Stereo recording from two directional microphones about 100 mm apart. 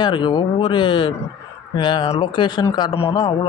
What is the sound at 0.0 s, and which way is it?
Speech, 50° left (ahead or behind).